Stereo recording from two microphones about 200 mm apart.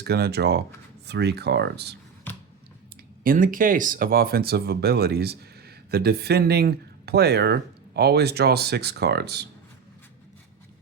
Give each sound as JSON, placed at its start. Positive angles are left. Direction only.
{"t": 0.0, "sound": "speech", "side_deg": -55}
{"t": 2.3, "sound": "finger snapping", "side_deg": 10}
{"t": 3.2, "sound": "speech", "side_deg": -45}